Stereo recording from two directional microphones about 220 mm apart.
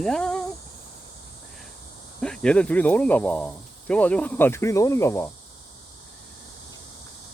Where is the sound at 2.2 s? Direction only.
5° left (ahead or behind).